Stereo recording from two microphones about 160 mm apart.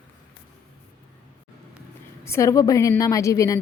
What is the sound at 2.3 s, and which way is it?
A woman's voice, 20° left (ahead or behind).